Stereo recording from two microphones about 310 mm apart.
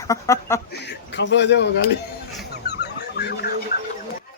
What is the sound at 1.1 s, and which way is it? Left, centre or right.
Speech, left.